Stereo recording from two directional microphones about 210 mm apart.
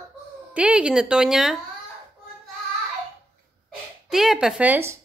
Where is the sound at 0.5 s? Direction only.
5° right (ahead or behind).